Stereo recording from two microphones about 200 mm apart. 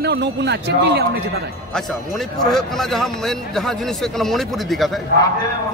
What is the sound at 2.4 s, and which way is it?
A man's voice, centre (ahead or behind).